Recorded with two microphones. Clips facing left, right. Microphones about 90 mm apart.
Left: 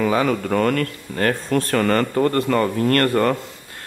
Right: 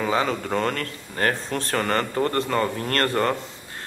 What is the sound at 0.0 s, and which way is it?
Speech, 25° right (ahead or behind).